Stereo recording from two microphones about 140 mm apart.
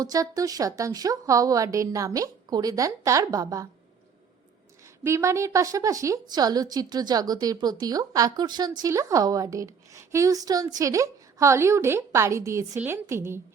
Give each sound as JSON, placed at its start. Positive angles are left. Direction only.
{"t": 0.0, "sound": "a woman's voice", "side_deg": -25}
{"t": 5.0, "sound": "a woman's voice", "side_deg": -20}